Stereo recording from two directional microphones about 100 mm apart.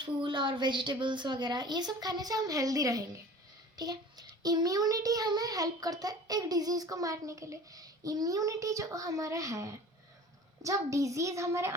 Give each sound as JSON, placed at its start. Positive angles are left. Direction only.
{"t": 0.0, "sound": "a woman's voice", "side_deg": -55}